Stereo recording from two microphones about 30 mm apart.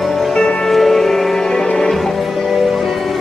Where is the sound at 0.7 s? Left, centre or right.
Centre.